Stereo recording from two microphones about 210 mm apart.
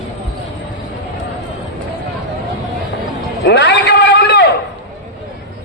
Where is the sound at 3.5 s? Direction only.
55° left (ahead or behind).